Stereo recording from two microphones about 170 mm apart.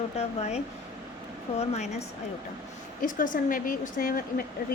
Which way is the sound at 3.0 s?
50° left (ahead or behind).